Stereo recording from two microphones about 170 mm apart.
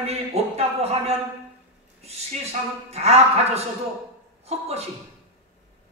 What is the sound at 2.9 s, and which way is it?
Speech, 40° right (ahead or behind).